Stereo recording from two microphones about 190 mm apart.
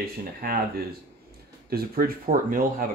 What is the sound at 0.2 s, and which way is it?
Speech, 50° right (ahead or behind).